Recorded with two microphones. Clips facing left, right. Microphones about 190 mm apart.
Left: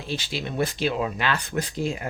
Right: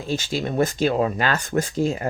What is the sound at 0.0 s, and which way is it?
Speech, 45° right (ahead or behind).